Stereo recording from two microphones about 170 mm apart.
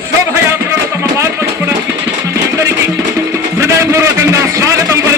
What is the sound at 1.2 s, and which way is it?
Music, 15° right (ahead or behind).